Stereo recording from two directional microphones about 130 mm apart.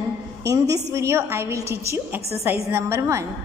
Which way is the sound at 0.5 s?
25° right (ahead or behind).